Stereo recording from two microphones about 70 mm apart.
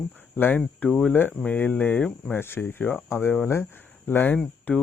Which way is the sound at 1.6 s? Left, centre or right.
Left.